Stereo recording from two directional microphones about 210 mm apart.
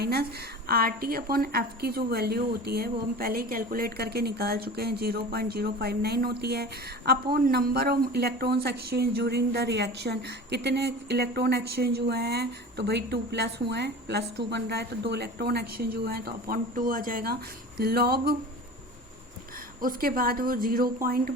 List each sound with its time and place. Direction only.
0.0 s a woman's voice: 50° right (ahead or behind)
19.8 s a woman's voice: 45° right (ahead or behind)